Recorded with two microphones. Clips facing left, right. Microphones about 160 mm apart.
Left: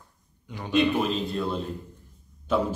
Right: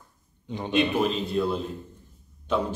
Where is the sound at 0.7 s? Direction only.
Centre (ahead or behind).